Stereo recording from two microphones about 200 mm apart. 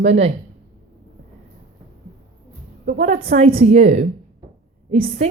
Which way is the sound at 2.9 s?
35° right (ahead or behind).